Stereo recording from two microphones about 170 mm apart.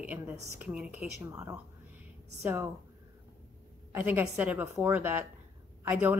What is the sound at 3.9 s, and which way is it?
Speech, 10° right (ahead or behind).